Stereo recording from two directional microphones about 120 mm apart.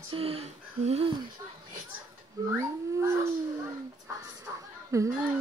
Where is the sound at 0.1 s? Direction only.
55° right (ahead or behind).